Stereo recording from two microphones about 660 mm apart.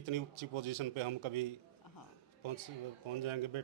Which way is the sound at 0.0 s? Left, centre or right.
Right.